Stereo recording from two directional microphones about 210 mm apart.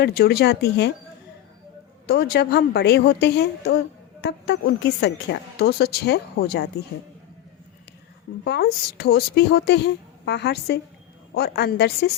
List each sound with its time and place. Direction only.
0.0 s a woman's voice: 50° left (ahead or behind)
2.0 s a woman's voice: 50° left (ahead or behind)
8.4 s a woman's voice: 50° left (ahead or behind)